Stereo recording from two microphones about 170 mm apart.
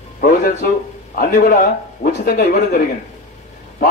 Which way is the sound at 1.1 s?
50° left (ahead or behind).